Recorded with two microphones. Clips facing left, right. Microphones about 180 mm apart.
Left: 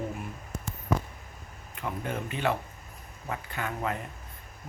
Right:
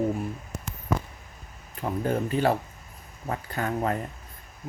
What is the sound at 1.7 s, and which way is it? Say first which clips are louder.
Speech: right 7 dB; 35° right (ahead or behind).